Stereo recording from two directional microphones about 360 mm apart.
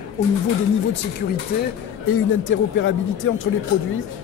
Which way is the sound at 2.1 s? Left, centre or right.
Left.